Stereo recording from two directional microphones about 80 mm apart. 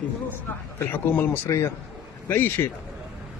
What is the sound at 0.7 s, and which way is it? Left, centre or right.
Speech, left.